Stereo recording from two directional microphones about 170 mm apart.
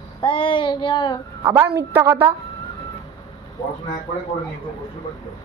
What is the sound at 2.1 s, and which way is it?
Speech, 30° right (ahead or behind).